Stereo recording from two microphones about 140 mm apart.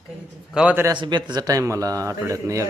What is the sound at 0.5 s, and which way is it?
Speech, 10° right (ahead or behind).